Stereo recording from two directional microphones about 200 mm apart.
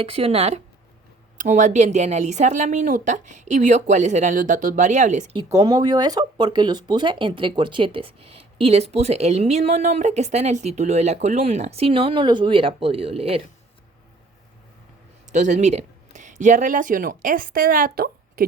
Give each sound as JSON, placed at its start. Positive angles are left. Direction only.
{"t": 0.0, "sound": "a woman's voice", "side_deg": -30}
{"t": 5.4, "sound": "speech", "side_deg": -20}
{"t": 15.3, "sound": "speech", "side_deg": -35}